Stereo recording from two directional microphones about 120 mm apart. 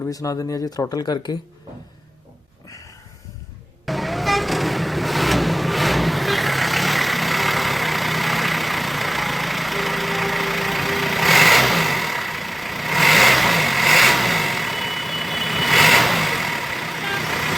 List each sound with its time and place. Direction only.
0.1 s speech: 30° left (ahead or behind)
3.8 s vehicle: centre (ahead or behind)